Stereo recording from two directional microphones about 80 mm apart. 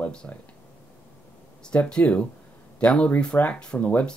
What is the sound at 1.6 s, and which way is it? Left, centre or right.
Speech, centre.